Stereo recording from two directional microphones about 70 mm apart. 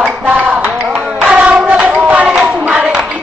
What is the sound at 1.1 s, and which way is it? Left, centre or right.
Music, centre.